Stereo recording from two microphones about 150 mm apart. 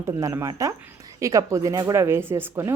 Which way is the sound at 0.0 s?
15° right (ahead or behind).